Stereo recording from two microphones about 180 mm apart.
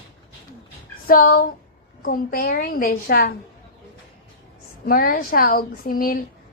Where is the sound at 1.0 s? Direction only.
55° left (ahead or behind).